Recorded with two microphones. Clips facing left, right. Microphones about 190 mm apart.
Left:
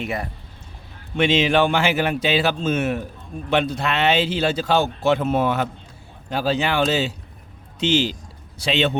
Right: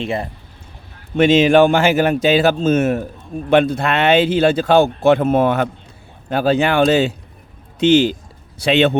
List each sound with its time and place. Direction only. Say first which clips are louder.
0.0 s speech: right 5 dB; 25° right (ahead or behind)
1.1 s speech: right 7 dB; 45° right (ahead or behind)